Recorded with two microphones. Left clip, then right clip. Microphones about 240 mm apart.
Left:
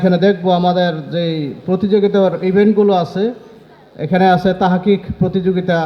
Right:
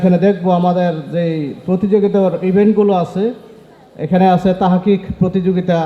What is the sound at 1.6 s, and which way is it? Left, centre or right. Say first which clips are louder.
A man's voice: even; left.